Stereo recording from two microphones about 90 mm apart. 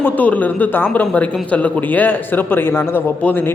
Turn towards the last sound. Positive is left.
turn(degrees=20)  # may be behind; listen again after turning